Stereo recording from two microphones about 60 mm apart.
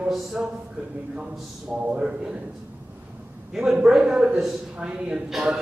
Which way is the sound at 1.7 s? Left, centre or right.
Right.